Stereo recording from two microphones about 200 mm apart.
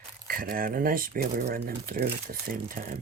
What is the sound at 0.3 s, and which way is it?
Speech, 45° right (ahead or behind).